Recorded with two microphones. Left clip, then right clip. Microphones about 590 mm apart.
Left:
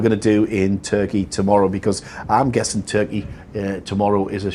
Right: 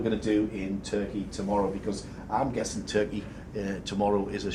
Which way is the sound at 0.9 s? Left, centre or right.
Left.